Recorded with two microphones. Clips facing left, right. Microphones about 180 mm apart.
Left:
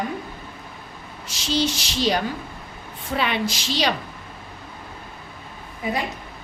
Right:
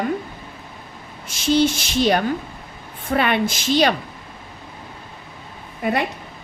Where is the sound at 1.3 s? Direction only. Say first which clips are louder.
Right 6 dB; 55° right (ahead or behind).